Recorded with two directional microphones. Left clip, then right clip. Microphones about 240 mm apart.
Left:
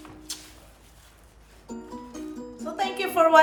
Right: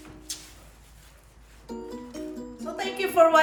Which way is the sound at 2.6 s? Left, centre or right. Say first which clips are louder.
Left 2 dB; centre.